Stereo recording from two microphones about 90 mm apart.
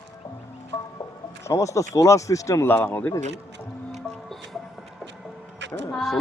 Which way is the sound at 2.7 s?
25° left (ahead or behind).